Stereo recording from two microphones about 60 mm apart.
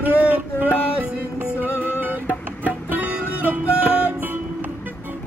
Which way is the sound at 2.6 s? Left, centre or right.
Right.